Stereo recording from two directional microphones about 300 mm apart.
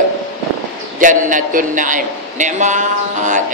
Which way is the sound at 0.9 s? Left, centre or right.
Right.